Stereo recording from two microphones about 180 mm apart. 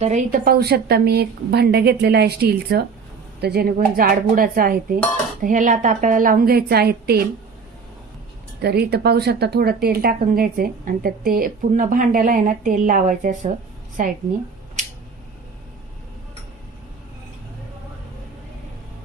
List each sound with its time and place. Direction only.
0.0 s a woman's voice: 40° right (ahead or behind); by 7.3 s 60° right (ahead or behind)
8.6 s a woman's voice: 65° right (ahead or behind); by 14.1 s 45° right (ahead or behind)
14.8 s a sound: 40° right (ahead or behind)